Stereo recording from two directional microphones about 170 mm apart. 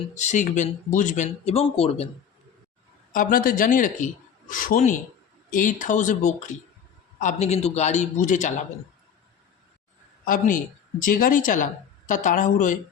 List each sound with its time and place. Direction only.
0.1 s speech: 45° left (ahead or behind)
3.1 s a man's voice: 55° left (ahead or behind)
10.2 s speech: 55° left (ahead or behind)